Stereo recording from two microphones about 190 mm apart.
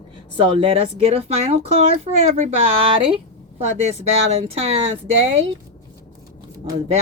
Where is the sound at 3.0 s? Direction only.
30° right (ahead or behind).